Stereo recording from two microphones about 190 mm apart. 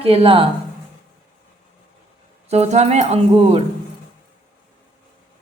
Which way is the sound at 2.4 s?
35° right (ahead or behind).